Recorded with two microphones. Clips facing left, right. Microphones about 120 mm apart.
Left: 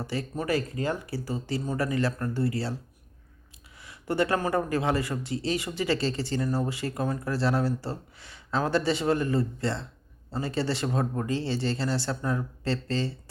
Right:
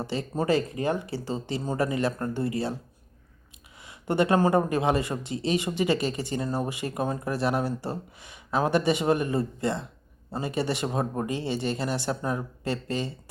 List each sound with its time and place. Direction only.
0.0 s speech: 20° right (ahead or behind)
3.8 s speech: 20° right (ahead or behind)